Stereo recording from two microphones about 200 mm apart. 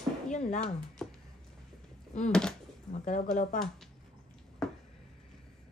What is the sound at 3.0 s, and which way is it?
Speech, 40° left (ahead or behind).